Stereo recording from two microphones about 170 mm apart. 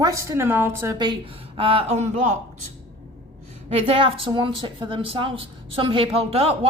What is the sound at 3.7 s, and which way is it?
Speech, 35° right (ahead or behind).